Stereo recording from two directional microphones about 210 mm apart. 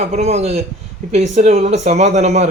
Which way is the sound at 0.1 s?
30° right (ahead or behind).